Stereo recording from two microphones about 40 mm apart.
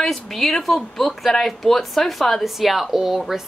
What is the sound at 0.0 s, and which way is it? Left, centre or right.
A woman's voice, centre.